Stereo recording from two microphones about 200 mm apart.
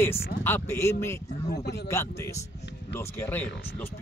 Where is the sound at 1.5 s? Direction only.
55° left (ahead or behind).